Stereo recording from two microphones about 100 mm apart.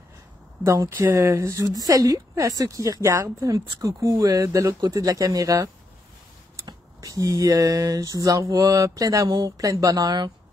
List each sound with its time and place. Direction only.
0.7 s a woman's voice: 30° right (ahead or behind); by 10.3 s 45° right (ahead or behind)